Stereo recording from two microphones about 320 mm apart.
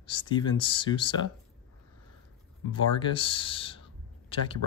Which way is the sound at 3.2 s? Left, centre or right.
Centre.